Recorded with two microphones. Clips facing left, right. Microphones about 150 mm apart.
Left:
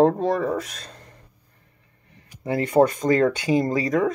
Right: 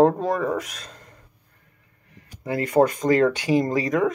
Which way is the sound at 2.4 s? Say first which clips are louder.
Left 1 dB; 30° left (ahead or behind).